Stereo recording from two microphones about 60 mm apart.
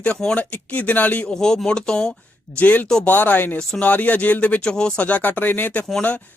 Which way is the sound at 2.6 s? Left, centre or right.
Left.